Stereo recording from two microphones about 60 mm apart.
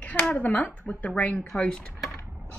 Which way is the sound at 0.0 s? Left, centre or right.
Left.